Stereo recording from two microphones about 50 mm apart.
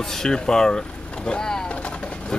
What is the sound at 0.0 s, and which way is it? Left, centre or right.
Speech, centre.